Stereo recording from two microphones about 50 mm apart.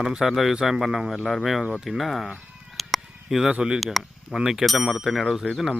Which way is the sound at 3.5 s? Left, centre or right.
Centre.